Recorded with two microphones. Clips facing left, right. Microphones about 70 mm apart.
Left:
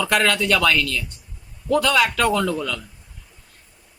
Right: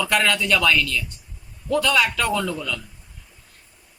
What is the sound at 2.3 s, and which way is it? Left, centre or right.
Speech, left.